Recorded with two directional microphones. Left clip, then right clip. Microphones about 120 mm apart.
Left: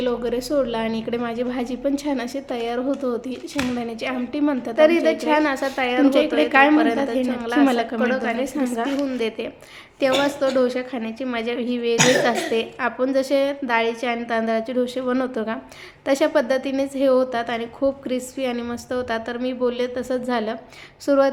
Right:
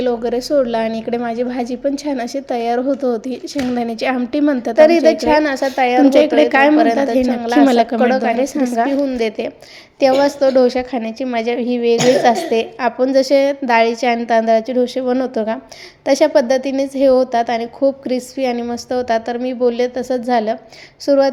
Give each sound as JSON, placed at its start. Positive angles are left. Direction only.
{"t": 0.0, "sound": "a woman's voice", "side_deg": -25}
{"t": 3.8, "sound": "a woman's voice", "side_deg": -50}
{"t": 6.1, "sound": "a woman's voice", "side_deg": -55}
{"t": 6.7, "sound": "a woman's voice", "side_deg": -35}
{"t": 7.6, "sound": "a woman's voice", "side_deg": -45}
{"t": 18.5, "sound": "a woman's voice", "side_deg": -25}
{"t": 18.9, "sound": "a woman's voice", "side_deg": -35}